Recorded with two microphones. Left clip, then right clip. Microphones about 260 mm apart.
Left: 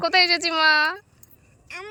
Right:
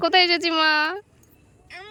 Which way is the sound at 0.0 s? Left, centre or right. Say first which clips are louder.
Right 1 dB; centre.